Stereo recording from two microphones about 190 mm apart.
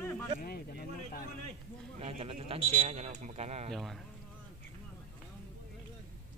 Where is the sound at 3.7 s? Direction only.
Centre (ahead or behind).